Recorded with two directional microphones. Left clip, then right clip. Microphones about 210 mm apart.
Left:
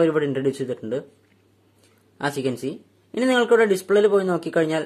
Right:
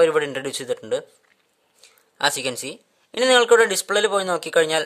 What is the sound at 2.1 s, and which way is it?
A man's voice, 40° right (ahead or behind).